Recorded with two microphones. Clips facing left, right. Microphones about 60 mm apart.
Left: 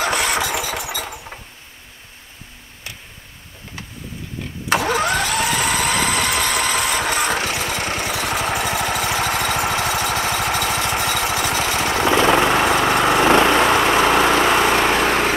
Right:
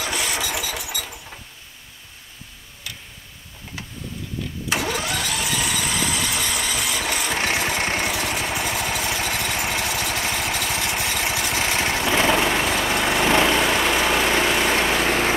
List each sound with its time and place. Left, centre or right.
0.0 s engine: left
0.5 s engine: left
4.6 s engine: left
7.5 s vehicle: right
8.1 s vehicle: left
8.5 s engine: left
9.8 s engine: left
10.7 s vehicle: left